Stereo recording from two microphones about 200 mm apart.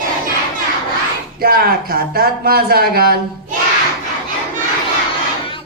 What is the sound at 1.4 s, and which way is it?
Speech, 50° right (ahead or behind).